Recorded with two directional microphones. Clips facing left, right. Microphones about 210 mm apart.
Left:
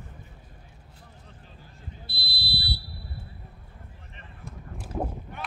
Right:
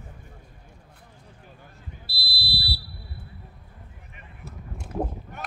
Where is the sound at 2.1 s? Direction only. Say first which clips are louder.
Right 1 dB; 5° right (ahead or behind).